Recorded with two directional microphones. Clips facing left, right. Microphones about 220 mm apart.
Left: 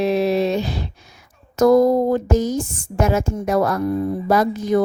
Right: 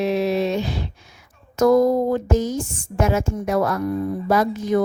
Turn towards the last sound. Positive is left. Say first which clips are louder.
# left 2 dB
turn(degrees=35)  # may be behind; listen again after turning